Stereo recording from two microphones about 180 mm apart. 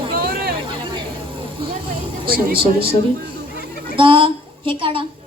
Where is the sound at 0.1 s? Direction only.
55° right (ahead or behind).